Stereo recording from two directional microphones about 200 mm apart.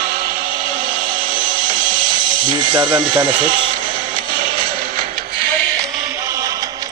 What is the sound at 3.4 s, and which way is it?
Music, 45° right (ahead or behind).